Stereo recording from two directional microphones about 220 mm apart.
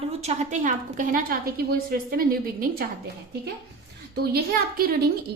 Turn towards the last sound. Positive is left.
turn(degrees=-45)  # may be behind; listen again after turning